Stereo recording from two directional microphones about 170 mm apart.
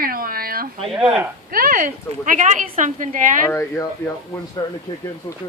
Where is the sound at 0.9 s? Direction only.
5° right (ahead or behind).